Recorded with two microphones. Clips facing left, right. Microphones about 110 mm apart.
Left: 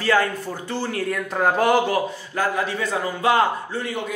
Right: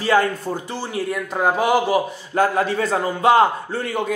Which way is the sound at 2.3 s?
35° right (ahead or behind).